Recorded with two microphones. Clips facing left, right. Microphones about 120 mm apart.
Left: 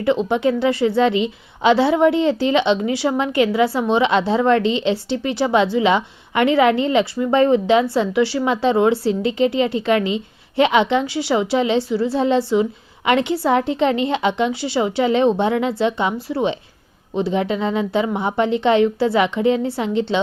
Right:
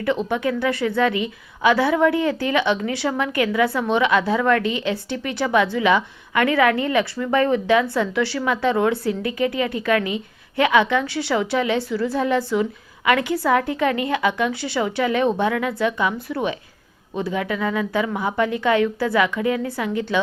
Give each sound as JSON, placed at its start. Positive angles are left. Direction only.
{"t": 0.0, "sound": "a woman's voice", "side_deg": 20}